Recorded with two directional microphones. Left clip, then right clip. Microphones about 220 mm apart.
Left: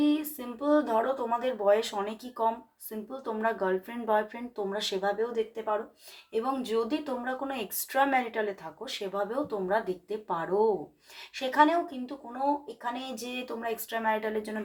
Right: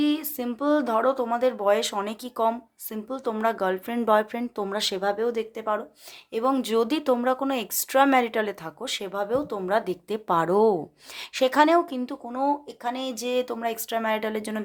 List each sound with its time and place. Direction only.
0.0 s speech: 50° right (ahead or behind)